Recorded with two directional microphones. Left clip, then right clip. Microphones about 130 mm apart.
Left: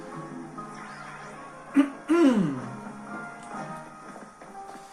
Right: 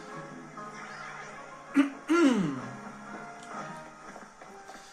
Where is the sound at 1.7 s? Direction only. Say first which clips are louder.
Left 3 dB; 30° right (ahead or behind).